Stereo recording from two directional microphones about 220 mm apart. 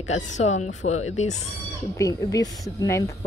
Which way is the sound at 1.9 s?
15° left (ahead or behind).